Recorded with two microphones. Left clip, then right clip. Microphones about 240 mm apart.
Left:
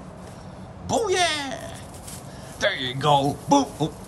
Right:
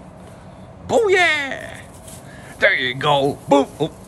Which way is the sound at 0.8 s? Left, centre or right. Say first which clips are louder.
Right 7 dB; centre.